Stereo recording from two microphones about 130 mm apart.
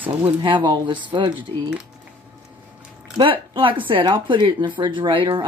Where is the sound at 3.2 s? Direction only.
40° right (ahead or behind).